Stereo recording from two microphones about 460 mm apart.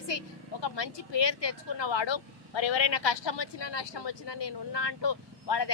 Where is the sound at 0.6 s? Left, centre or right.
Left.